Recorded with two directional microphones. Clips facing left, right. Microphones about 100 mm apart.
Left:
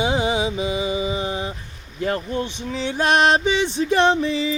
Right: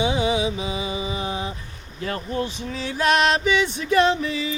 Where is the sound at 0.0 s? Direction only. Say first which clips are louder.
Left 1 dB; 35° left (ahead or behind).